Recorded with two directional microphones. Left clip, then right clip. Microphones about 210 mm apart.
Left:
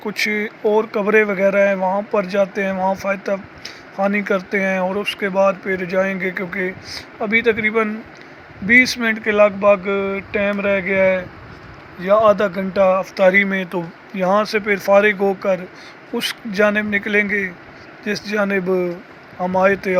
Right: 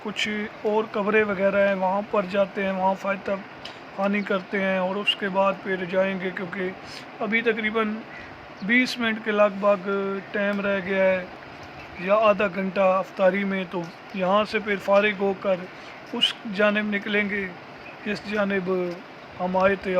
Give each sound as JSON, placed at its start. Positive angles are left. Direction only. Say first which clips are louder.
{"t": 0.3, "sound": "speech", "louder": "left 9 dB", "side_deg": -30}
{"t": 0.8, "sound": "speech", "louder": "left 6 dB", "side_deg": 15}